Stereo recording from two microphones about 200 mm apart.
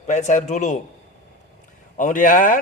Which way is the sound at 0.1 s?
35° left (ahead or behind).